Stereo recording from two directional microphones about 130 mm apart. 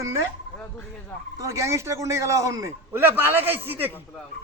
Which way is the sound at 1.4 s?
20° right (ahead or behind).